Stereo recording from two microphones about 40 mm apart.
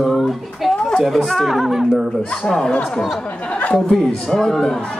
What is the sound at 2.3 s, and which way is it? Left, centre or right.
Speech, centre.